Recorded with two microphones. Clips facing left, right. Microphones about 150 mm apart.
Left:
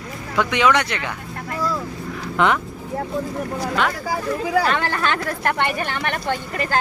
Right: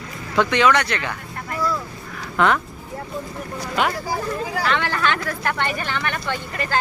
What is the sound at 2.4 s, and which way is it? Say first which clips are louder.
Speech: even; 20° left (ahead or behind).